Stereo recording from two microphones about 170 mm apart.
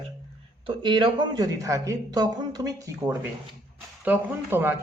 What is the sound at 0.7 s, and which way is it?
Speech, 30° right (ahead or behind).